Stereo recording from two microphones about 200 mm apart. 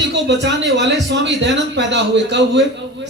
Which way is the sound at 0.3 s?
60° right (ahead or behind).